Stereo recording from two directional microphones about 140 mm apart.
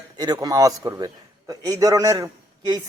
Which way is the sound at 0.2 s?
25° right (ahead or behind).